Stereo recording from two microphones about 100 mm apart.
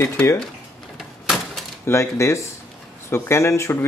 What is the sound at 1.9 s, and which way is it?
Speech, 25° left (ahead or behind).